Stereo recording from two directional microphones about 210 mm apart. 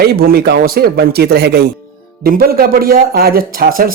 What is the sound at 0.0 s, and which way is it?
Speech, 50° right (ahead or behind).